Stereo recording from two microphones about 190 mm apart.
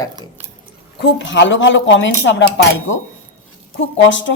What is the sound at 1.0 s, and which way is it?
Speech, 70° left (ahead or behind).